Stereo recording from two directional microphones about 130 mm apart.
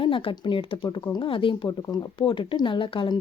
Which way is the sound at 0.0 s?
40° left (ahead or behind).